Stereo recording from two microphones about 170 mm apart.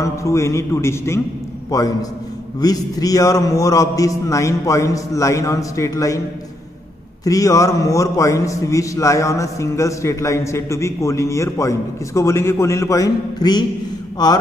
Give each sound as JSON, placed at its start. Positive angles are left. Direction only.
{"t": 0.0, "sound": "a man's voice", "side_deg": 15}
{"t": 7.2, "sound": "a man's voice", "side_deg": 20}